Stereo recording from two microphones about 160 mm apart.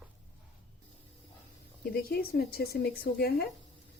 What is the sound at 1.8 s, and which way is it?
Speech, 70° left (ahead or behind).